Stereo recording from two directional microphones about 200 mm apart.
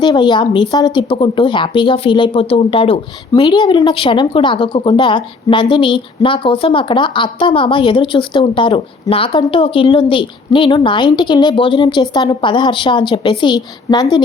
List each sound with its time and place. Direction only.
0.0 s speech: 20° left (ahead or behind)